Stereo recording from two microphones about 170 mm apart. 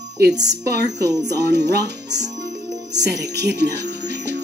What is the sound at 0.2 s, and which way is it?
Speech, 85° right.